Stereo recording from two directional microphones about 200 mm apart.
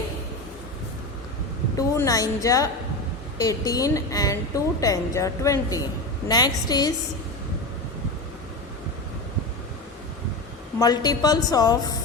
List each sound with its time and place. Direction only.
2.0 s a woman's voice: 15° left (ahead or behind)
10.8 s a woman's voice: 20° left (ahead or behind)